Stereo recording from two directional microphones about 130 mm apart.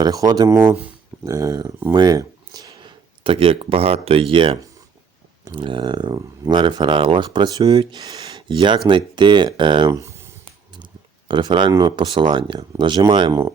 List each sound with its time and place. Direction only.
0.0 s speech: 30° right (ahead or behind)
3.2 s speech: 45° right (ahead or behind)
9.9 s a sound: 20° right (ahead or behind)
11.3 s speech: 35° right (ahead or behind)